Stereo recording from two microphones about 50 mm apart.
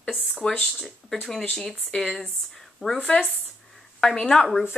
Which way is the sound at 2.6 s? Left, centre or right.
Centre.